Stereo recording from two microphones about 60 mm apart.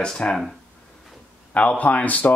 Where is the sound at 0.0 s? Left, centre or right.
Centre.